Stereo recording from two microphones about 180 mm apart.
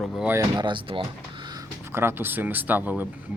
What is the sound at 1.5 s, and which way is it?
Speech, 15° right (ahead or behind).